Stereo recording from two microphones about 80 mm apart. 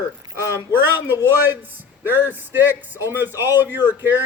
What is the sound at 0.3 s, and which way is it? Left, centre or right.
Speech, right.